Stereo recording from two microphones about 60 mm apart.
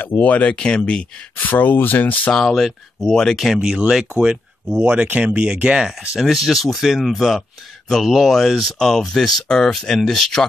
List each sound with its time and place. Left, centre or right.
0.2 s speech: left
1.3 s speech: left
2.3 s speech: centre
3.4 s speech: centre
4.6 s speech: right; by 10.4 s centre